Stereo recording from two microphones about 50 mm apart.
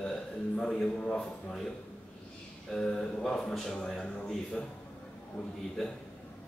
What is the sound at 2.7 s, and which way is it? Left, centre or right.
Speech, centre.